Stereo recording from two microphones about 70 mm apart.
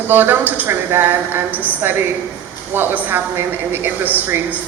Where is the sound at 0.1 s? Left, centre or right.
Right.